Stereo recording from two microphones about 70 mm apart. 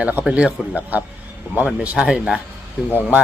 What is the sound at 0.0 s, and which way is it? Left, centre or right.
A man's voice, right.